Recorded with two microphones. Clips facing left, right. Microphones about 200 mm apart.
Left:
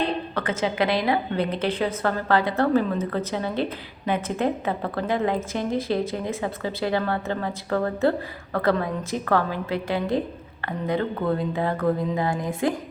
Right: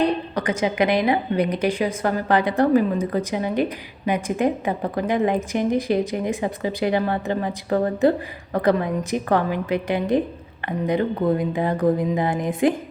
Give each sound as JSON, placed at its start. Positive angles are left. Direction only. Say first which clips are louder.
{"t": 0.3, "sound": "a woman's voice", "louder": "even", "side_deg": -15}